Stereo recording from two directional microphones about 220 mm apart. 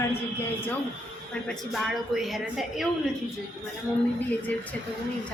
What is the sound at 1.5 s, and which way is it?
A woman's voice, centre (ahead or behind).